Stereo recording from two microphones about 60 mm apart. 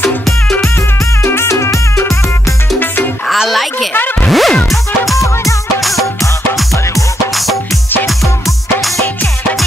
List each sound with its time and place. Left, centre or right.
1.2 s music: left
1.5 s music: left
3.4 s a child's voice: centre
4.3 s music: centre